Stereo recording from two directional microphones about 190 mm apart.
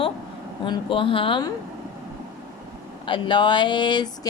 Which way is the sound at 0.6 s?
25° left (ahead or behind).